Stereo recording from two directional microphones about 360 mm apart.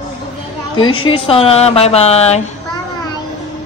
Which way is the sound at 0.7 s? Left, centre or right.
Centre.